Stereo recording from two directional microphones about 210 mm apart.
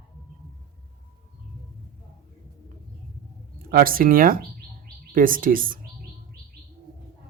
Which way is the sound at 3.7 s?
45° right (ahead or behind).